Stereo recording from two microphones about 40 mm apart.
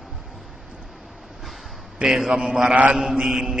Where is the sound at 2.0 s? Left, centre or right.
Centre.